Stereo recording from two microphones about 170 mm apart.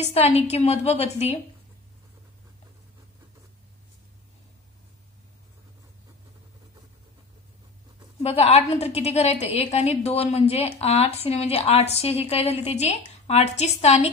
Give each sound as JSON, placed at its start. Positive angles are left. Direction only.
{"t": 0.0, "sound": "a woman's voice", "side_deg": 35}
{"t": 8.2, "sound": "a woman's voice", "side_deg": 35}